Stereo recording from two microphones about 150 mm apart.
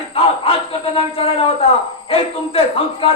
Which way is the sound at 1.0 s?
40° left (ahead or behind).